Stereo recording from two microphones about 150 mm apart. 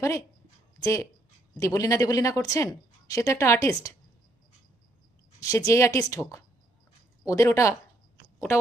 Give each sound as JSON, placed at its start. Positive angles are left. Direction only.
{"t": 0.0, "sound": "speech", "side_deg": 20}
{"t": 5.4, "sound": "speech", "side_deg": 20}
{"t": 7.3, "sound": "speech", "side_deg": 20}